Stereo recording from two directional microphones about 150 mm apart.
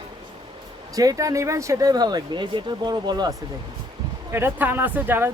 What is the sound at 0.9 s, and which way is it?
Speech, 25° right (ahead or behind).